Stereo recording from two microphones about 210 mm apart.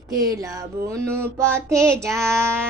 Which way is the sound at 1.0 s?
10° right (ahead or behind).